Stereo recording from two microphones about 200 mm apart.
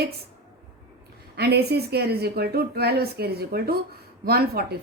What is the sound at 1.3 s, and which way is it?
A woman's voice, 55° right (ahead or behind).